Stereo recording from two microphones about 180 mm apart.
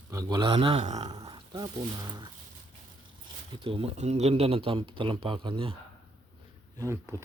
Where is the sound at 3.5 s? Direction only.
30° right (ahead or behind).